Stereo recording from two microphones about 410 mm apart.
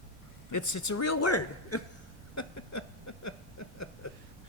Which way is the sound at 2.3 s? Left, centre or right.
Left.